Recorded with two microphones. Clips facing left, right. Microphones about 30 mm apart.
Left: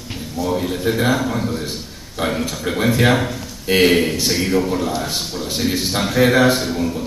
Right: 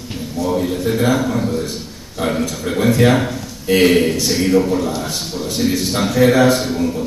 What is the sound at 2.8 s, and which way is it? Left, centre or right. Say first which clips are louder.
A man's voice: right 2 dB; centre.